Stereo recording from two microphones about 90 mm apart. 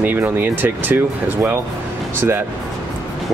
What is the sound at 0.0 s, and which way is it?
Speech, 20° right (ahead or behind).